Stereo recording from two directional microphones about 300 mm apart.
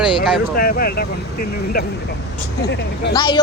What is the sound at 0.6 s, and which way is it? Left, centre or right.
Speech, left.